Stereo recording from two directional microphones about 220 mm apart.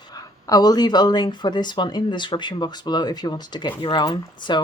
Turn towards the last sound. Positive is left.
turn(degrees=20)  # may be behind; listen again after turning